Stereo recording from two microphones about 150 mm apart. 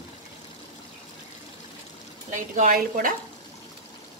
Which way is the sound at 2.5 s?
65° right (ahead or behind).